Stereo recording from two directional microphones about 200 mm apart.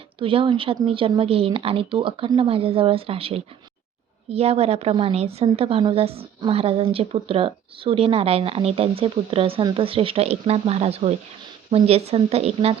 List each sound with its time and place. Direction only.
0.2 s a woman's voice: 25° right (ahead or behind)